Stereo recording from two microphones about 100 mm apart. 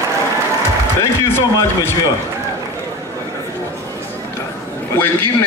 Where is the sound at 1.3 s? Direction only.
25° left (ahead or behind).